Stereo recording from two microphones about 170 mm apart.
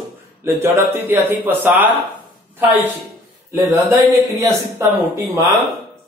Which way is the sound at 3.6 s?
15° right (ahead or behind).